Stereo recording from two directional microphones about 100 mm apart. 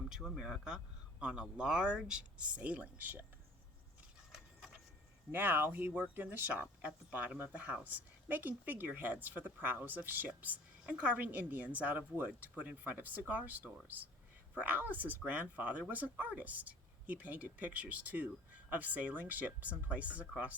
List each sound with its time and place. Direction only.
0.1 s speech: 5° right (ahead or behind)
5.3 s speech: 20° right (ahead or behind)